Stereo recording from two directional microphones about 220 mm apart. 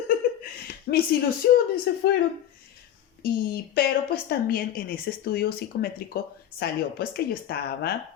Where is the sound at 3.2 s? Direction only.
45° left (ahead or behind).